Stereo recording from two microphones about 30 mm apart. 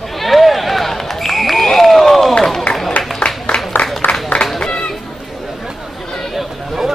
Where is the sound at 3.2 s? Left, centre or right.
Left.